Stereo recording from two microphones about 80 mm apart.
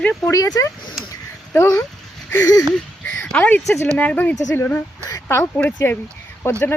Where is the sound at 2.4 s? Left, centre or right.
Left.